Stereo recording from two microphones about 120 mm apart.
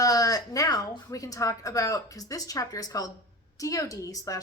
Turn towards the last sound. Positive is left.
turn(degrees=30)  # may be behind; listen again after turning